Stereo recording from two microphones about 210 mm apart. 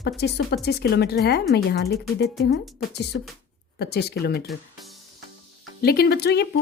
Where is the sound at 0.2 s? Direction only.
50° left (ahead or behind).